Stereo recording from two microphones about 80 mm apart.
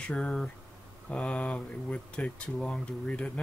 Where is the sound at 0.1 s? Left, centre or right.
Centre.